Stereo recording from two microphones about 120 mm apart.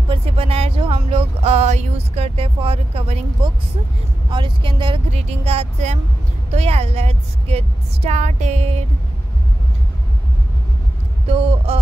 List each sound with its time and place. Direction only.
0.1 s speech: 55° right (ahead or behind)
4.3 s speech: 45° right (ahead or behind)
5.1 s speech: 60° right (ahead or behind); by 8.6 s 80° right
11.2 s a sound: 55° right (ahead or behind)